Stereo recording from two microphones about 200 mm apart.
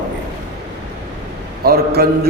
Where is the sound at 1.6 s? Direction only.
50° right (ahead or behind).